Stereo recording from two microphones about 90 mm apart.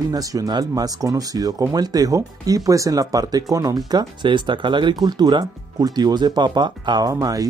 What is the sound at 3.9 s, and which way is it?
Speech, 55° right (ahead or behind).